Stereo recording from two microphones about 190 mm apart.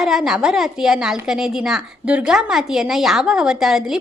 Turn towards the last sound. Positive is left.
turn(degrees=0)  # may be behind; listen again after turning